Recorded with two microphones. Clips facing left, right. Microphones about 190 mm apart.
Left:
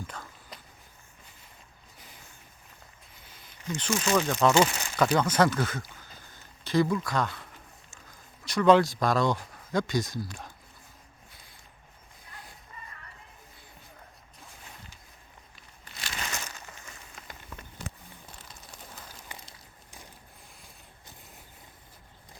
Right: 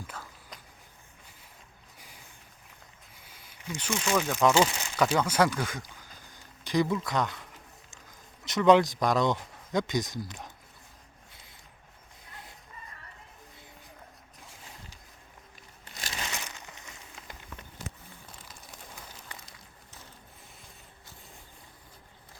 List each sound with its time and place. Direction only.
0.1 s a sound: 5° right (ahead or behind)
3.2 s speech: 10° right (ahead or behind)
8.4 s speech: 20° right (ahead or behind)
12.3 s music: 25° right (ahead or behind)
16.3 s crushing: 15° right (ahead or behind)